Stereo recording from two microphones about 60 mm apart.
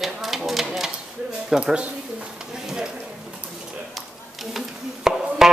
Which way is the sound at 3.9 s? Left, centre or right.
Centre.